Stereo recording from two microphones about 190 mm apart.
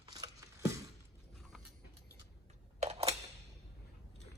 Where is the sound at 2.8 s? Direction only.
35° right (ahead or behind).